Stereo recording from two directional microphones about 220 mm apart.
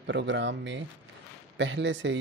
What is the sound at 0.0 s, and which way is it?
Speech, 55° right (ahead or behind).